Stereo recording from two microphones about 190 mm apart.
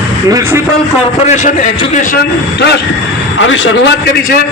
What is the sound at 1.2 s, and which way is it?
Speech, 40° left (ahead or behind).